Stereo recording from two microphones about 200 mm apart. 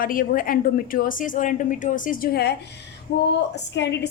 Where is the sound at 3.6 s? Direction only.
60° left (ahead or behind).